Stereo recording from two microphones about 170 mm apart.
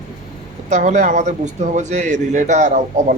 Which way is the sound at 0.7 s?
45° right (ahead or behind).